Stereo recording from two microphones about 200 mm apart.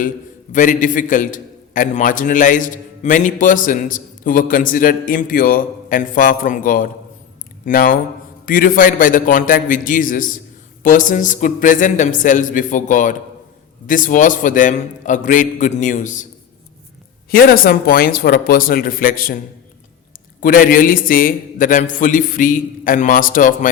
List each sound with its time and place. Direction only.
0.5 s a man's voice: 40° left (ahead or behind)
17.3 s a man's voice: 45° left (ahead or behind)
20.4 s a man's voice: 45° left (ahead or behind)